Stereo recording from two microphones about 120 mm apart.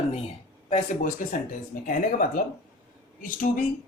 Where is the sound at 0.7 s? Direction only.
90° left.